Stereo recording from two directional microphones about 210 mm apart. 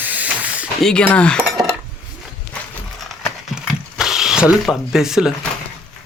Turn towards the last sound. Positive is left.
turn(degrees=0)  # may be behind; listen again after turning